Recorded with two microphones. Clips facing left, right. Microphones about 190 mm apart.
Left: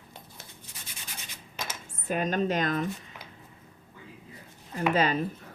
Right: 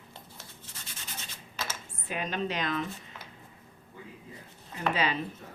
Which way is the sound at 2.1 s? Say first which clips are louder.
Left 6 dB; 45° left (ahead or behind).